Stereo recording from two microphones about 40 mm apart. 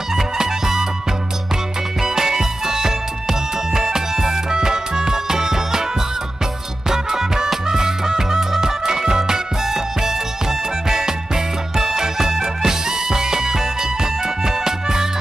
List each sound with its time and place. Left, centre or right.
0.1 s music: centre
2.0 s music: centre
6.9 s music: centre